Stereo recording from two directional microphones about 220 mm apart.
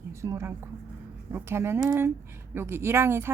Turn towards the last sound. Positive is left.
turn(degrees=-10)  # may be behind; listen again after turning